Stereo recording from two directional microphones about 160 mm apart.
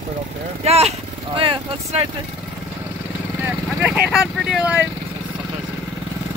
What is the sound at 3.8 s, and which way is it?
Speech, 5° right (ahead or behind).